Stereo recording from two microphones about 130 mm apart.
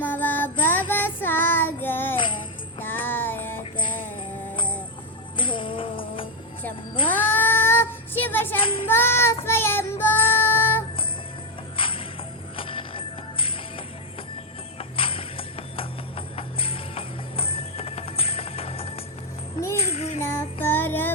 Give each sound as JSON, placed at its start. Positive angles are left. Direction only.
{"t": 0.0, "sound": "music", "side_deg": 15}
{"t": 0.7, "sound": "child singing", "side_deg": 15}
{"t": 2.7, "sound": "music", "side_deg": 15}
{"t": 5.4, "sound": "music", "side_deg": 40}
{"t": 7.1, "sound": "child singing", "side_deg": 15}
{"t": 8.5, "sound": "child singing", "side_deg": 45}
{"t": 8.9, "sound": "child singing", "side_deg": 15}
{"t": 11.8, "sound": "music", "side_deg": 45}
{"t": 19.5, "sound": "music", "side_deg": 20}
{"t": 19.8, "sound": "music", "side_deg": 50}
{"t": 20.2, "sound": "child singing", "side_deg": 15}